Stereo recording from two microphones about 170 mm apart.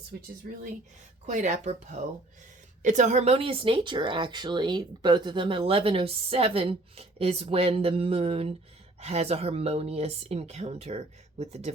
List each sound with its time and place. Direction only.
0.1 s speech: 70° right (ahead or behind)
1.3 s speech: 45° right (ahead or behind)